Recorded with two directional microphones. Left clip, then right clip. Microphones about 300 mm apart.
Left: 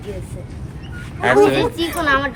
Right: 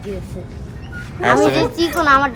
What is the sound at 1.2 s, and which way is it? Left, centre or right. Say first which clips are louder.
Speech: left 1 dB; centre.